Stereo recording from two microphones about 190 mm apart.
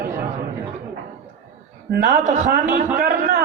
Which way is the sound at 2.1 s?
40° right (ahead or behind).